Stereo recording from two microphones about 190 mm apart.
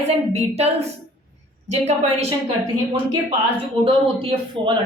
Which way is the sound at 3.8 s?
30° right (ahead or behind).